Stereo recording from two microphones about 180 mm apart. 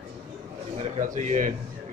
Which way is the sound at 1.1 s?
45° right (ahead or behind).